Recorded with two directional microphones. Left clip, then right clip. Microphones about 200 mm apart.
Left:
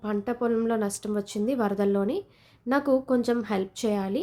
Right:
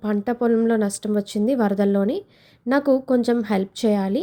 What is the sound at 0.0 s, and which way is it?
Speech, 25° right (ahead or behind).